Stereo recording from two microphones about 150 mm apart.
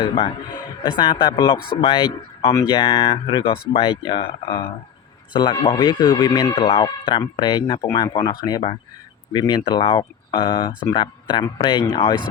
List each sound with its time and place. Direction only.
0.0 s speech: 40° left (ahead or behind)
2.5 s speech: 20° left (ahead or behind)
5.3 s speech: 30° left (ahead or behind)